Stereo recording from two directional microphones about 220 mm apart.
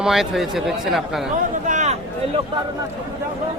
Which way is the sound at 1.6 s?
35° right (ahead or behind).